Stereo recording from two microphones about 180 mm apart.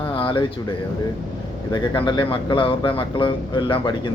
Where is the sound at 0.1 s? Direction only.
30° left (ahead or behind).